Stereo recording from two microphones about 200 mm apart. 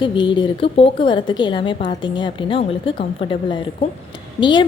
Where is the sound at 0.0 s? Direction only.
25° left (ahead or behind).